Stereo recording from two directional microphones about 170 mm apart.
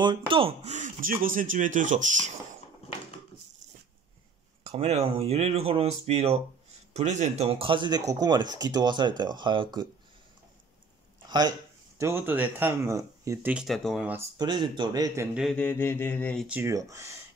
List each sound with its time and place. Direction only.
0.0 s speech: 30° right (ahead or behind); by 2.3 s 45° right (ahead or behind)
4.6 s speech: 35° right (ahead or behind)
11.2 s speech: 25° right (ahead or behind)
12.0 s speech: 15° right (ahead or behind)
14.1 s speech: 25° right (ahead or behind)
15.5 s mantra: 10° left (ahead or behind)
16.4 s speech: 15° right (ahead or behind)